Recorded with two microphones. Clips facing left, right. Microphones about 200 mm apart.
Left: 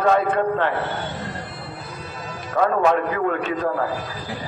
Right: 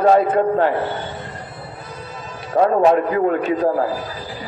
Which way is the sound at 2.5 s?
35° right (ahead or behind).